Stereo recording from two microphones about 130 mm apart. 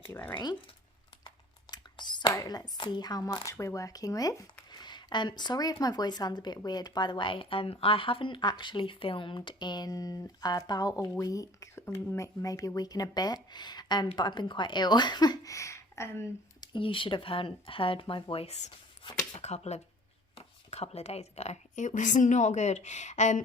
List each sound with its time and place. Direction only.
0.0 s speech: 15° left (ahead or behind)
1.7 s whispering: 35° left (ahead or behind)
2.3 s speech: 30° left (ahead or behind)
16.6 s a woman's voice: 40° left (ahead or behind); by 23.4 s 65° left (ahead or behind)